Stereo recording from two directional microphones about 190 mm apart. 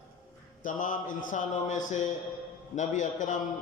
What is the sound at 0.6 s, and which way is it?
A man's voice, 45° left (ahead or behind).